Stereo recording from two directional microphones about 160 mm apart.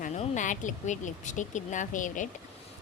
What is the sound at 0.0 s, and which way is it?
A woman's voice, 50° left (ahead or behind).